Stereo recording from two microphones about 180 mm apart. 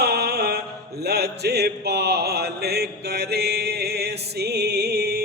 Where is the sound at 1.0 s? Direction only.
65° right (ahead or behind).